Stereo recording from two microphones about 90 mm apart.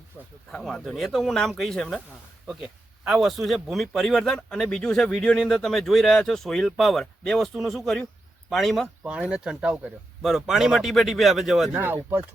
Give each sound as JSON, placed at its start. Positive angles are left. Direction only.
{"t": 0.5, "sound": "speech", "side_deg": 0}
{"t": 3.1, "sound": "speech", "side_deg": 0}
{"t": 9.0, "sound": "speech", "side_deg": -10}
{"t": 11.8, "sound": "speech", "side_deg": -20}